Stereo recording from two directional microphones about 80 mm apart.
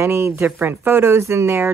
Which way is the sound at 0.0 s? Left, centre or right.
Right.